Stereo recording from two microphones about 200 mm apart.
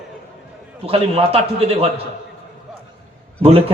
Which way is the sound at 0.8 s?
30° right (ahead or behind).